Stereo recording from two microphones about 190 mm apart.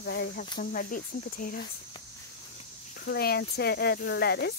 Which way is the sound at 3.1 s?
55° left (ahead or behind).